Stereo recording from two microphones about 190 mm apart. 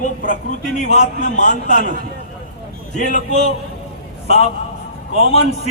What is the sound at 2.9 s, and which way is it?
Speech, 40° left (ahead or behind).